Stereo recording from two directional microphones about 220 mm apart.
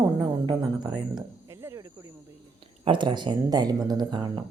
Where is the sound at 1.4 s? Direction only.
15° right (ahead or behind).